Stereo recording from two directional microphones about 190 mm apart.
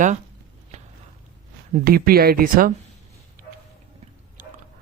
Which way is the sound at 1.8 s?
50° right (ahead or behind).